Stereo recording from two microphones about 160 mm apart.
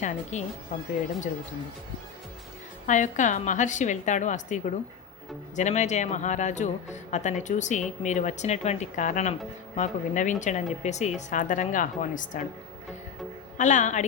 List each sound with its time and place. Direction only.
0.0 s speech: 50° left (ahead or behind)
2.8 s speech: 50° left (ahead or behind)
13.6 s speech: 50° left (ahead or behind)